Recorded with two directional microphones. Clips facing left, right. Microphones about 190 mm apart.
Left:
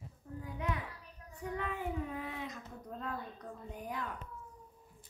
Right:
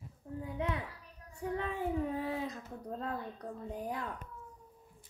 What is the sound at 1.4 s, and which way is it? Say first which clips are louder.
Speech: right 3 dB; 30° right (ahead or behind).